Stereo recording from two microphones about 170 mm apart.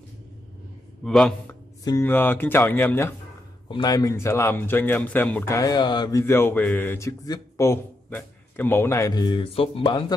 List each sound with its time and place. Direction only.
1.0 s a man's voice: 5° left (ahead or behind)
1.9 s a man's voice: 15° left (ahead or behind)
3.6 s a man's voice: 25° left (ahead or behind)